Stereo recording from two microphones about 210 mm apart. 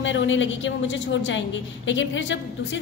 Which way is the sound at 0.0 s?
65° left (ahead or behind).